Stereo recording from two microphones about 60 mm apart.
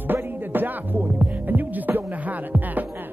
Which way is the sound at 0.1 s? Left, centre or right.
Right.